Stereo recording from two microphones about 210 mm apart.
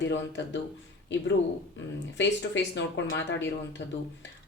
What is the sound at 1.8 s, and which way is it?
A woman's voice, 60° left (ahead or behind).